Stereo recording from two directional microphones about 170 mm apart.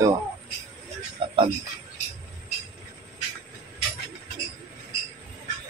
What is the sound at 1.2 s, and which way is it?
Speech, 30° right (ahead or behind).